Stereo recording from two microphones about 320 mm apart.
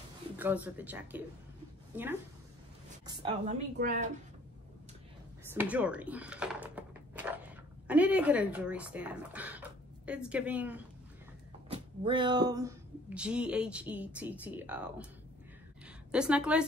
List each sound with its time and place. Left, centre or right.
0.4 s a woman's voice: centre
3.7 s speech: right
5.5 s speech: centre
11.7 s speech: centre
16.1 s speech: centre